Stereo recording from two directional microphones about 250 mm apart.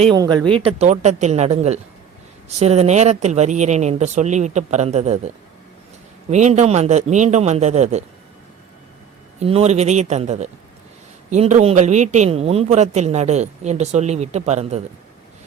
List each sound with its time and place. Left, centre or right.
0.0 s speech: centre
0.8 s a man's voice: right
6.3 s a man's voice: right
9.4 s a man's voice: right